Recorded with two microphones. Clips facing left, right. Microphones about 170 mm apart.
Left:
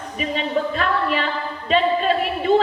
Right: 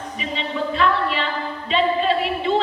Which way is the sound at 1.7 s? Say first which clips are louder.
Left 1 dB; 45° left (ahead or behind).